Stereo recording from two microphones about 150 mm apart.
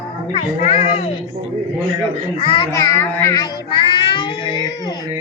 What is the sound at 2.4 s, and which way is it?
Speech, 35° left (ahead or behind).